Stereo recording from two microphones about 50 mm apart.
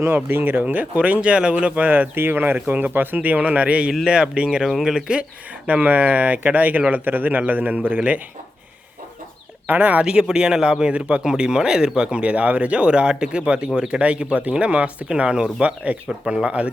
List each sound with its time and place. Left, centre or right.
0.1 s speech: right
0.6 s speech: right
5.6 s speech: right
9.6 s speech: right
10.0 s speech: right
16.0 s speech: centre